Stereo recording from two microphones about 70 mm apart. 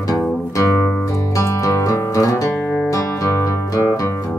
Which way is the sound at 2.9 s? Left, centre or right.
Left.